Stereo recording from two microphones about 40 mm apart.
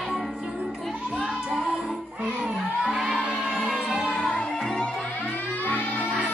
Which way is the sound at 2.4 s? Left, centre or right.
Centre.